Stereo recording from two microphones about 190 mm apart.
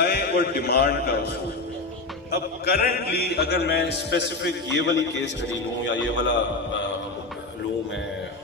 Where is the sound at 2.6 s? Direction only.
55° left (ahead or behind); by 6.4 s 75° left (ahead or behind).